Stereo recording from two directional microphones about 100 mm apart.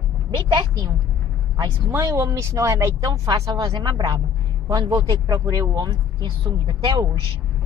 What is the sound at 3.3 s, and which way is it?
Speech, 45° right (ahead or behind).